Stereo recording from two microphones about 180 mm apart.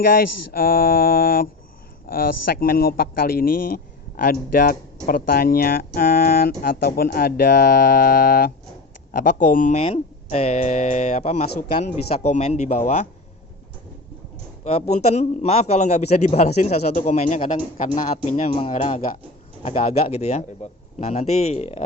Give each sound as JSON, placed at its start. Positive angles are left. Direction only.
{"t": 0.0, "sound": "a man's voice", "side_deg": 55}
{"t": 14.6, "sound": "a man's voice", "side_deg": 35}